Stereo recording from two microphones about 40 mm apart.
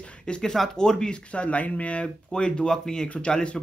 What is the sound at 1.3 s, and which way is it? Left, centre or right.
Speech, left.